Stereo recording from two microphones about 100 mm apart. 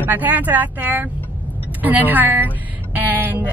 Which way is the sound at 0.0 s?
20° right (ahead or behind).